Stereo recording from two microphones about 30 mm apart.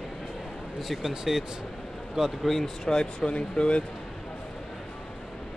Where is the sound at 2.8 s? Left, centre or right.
Left.